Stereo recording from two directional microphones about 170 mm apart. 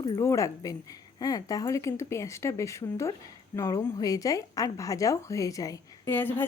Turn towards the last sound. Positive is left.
turn(degrees=10)  # may be behind; listen again after turning